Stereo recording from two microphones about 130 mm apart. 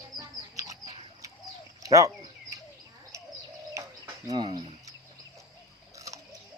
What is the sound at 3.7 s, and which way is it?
Bird, 25° right (ahead or behind).